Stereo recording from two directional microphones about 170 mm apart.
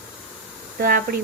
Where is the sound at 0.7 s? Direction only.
65° right (ahead or behind).